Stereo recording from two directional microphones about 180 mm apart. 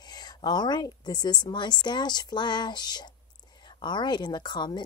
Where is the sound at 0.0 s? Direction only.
20° left (ahead or behind).